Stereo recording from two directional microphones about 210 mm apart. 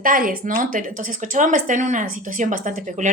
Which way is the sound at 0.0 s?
40° right (ahead or behind).